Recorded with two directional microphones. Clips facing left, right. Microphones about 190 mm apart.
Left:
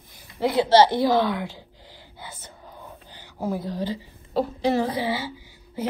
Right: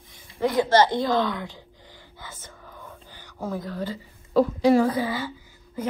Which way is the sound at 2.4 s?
15° left (ahead or behind).